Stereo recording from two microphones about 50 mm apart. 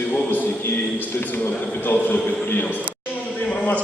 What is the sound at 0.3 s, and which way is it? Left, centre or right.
A man's voice, left.